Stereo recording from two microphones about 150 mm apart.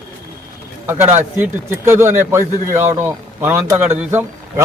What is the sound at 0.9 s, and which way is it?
Speech, 15° right (ahead or behind).